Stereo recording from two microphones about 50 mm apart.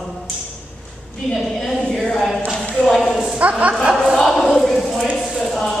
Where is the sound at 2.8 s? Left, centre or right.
Centre.